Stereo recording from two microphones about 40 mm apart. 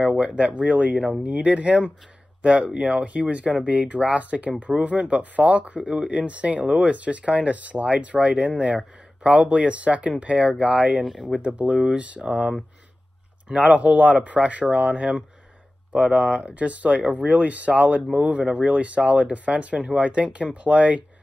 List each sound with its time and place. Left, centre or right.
0.0 s a sound: right
0.4 s speech: right
11.1 s speech: centre
11.4 s speech: right